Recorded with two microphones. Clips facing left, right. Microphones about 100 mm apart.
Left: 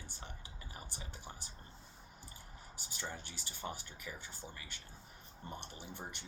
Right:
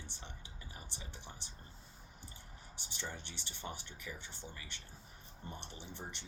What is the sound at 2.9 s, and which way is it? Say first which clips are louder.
Speech: even; 40° left (ahead or behind).